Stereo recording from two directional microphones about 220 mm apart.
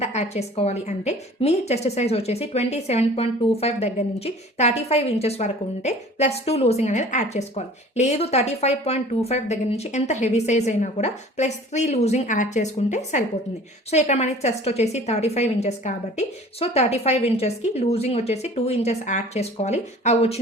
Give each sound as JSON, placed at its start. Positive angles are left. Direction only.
{"t": 0.0, "sound": "a woman's voice", "side_deg": 30}